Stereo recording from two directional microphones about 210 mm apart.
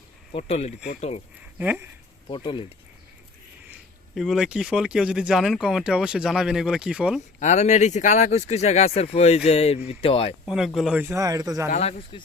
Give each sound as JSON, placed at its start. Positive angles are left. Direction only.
{"t": 0.3, "sound": "speech", "side_deg": 30}
{"t": 1.5, "sound": "speech", "side_deg": -10}
{"t": 2.3, "sound": "speech", "side_deg": 25}
{"t": 3.7, "sound": "speech", "side_deg": 0}
{"t": 7.3, "sound": "speech", "side_deg": 35}
{"t": 10.4, "sound": "speech", "side_deg": 0}
{"t": 11.7, "sound": "speech", "side_deg": 30}